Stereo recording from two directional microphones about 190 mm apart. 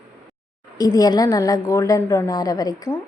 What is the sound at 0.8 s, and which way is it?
A woman's voice, 20° left (ahead or behind).